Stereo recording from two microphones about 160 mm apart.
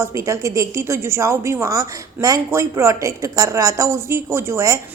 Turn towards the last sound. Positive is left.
turn(degrees=-20)  # may be behind; listen again after turning